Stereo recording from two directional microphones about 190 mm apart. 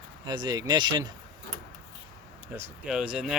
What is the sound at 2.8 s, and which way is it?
Speech, 5° right (ahead or behind).